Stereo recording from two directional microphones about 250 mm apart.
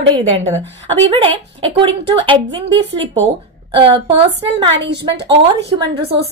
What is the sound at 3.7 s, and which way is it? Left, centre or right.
A woman's voice, right.